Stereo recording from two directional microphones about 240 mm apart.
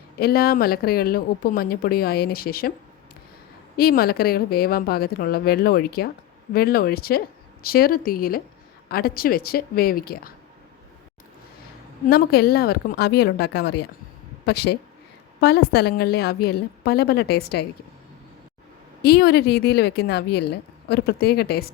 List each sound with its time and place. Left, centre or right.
0.2 s a woman's voice: left
3.8 s a woman's voice: left
12.0 s a woman's voice: left
19.0 s a woman's voice: left